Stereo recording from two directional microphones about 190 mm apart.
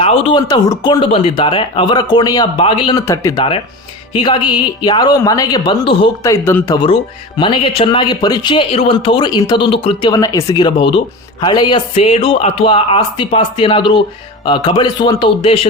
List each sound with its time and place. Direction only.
0.0 s speech: 30° left (ahead or behind)
3.1 s speech: 15° left (ahead or behind)
6.3 s speech: 15° left (ahead or behind)
6.7 s speech: 25° left (ahead or behind)